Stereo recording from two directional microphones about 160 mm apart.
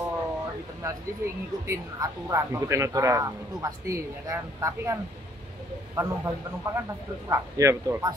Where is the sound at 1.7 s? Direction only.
20° right (ahead or behind).